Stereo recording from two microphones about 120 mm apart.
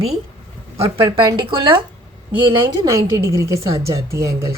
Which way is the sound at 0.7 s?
55° right (ahead or behind).